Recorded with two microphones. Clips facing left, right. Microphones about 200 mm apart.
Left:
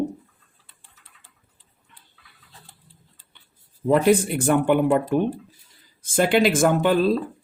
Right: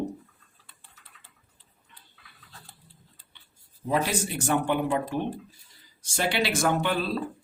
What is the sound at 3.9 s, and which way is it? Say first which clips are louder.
Speech: left 9 dB; 55° left (ahead or behind).